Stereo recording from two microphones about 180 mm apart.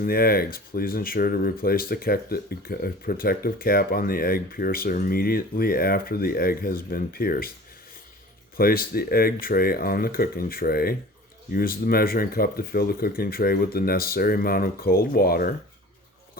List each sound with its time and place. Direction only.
0.0 s speech: 55° left (ahead or behind)
8.5 s speech: 55° left (ahead or behind)